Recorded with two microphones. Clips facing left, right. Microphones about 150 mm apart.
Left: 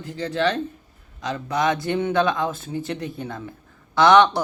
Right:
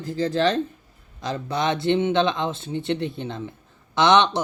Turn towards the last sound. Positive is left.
turn(degrees=-20)  # may be behind; listen again after turning